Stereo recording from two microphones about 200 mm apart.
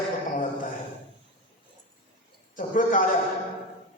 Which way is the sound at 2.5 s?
40° left (ahead or behind).